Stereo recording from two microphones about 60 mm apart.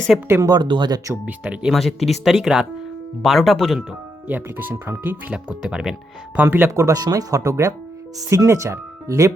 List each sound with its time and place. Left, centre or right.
0.1 s speech: centre
0.4 s speech: right
1.2 s speech: centre
1.7 s speech: centre
4.3 s speech: right
5.3 s speech: centre
6.3 s speech: right
6.7 s speech: right
8.3 s speech: right